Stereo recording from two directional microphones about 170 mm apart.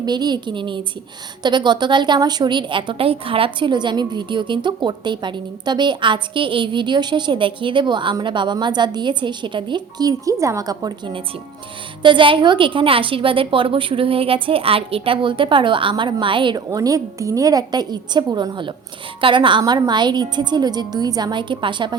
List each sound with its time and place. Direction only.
0.0 s a woman's voice: 25° right (ahead or behind)